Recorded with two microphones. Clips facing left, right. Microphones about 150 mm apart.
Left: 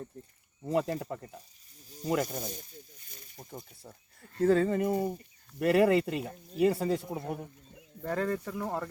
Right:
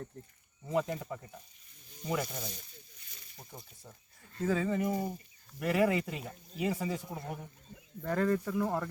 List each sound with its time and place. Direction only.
0.9 s speech: 45° left (ahead or behind)
1.9 s snake: 40° left (ahead or behind)
4.4 s speech: 60° left (ahead or behind)
8.0 s speech: 5° left (ahead or behind)